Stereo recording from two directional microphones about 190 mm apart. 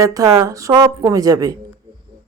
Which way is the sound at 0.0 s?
15° right (ahead or behind).